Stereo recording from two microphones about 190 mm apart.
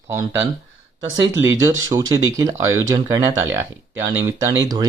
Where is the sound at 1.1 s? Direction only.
15° right (ahead or behind).